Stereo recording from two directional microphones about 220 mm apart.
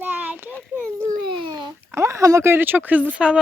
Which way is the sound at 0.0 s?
10° right (ahead or behind).